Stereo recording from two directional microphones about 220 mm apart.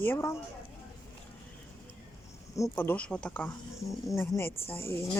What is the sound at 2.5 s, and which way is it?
Speech, 10° left (ahead or behind).